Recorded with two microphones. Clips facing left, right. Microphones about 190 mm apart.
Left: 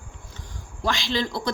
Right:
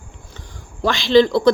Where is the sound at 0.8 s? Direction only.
70° right (ahead or behind).